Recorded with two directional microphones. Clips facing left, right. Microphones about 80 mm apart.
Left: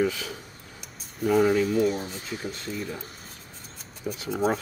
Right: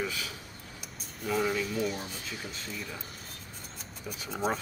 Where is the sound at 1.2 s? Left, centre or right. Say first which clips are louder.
Left 9 dB; left.